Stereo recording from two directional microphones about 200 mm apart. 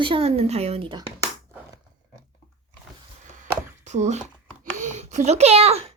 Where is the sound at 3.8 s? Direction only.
35° right (ahead or behind).